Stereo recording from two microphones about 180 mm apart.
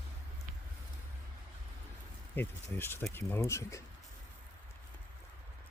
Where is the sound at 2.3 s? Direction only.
10° left (ahead or behind).